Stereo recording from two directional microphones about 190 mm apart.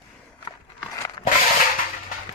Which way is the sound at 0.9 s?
15° left (ahead or behind).